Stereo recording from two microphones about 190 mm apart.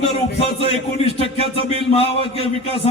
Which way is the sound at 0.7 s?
30° left (ahead or behind).